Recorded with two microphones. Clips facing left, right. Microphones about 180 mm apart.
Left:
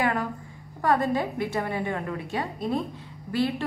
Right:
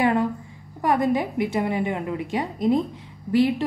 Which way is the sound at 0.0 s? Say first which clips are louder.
Right 5 dB; 20° right (ahead or behind).